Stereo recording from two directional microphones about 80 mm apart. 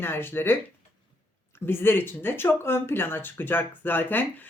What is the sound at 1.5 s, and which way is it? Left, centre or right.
Speech, left.